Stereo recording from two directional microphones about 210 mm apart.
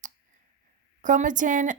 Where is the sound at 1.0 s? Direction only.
35° right (ahead or behind).